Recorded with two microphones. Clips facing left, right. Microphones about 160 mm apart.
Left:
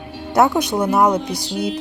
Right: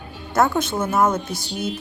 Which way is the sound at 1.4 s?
90° left.